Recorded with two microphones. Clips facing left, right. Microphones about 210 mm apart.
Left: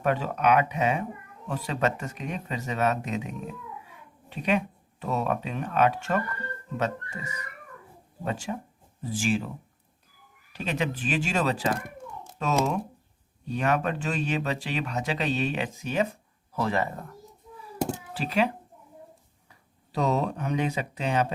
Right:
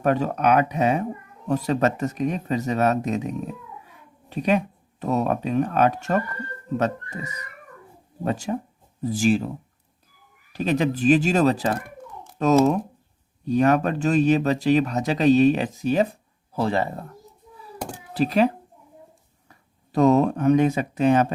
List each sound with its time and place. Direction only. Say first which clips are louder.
0.0 s speech: right 4 dB; 40° right (ahead or behind)
10.5 s speech: right 7 dB; 40° right (ahead or behind)
13.5 s speech: right 7 dB; 40° right (ahead or behind)
18.1 s speech: right 9 dB; 40° right (ahead or behind)
19.9 s speech: right 9 dB; 50° right (ahead or behind)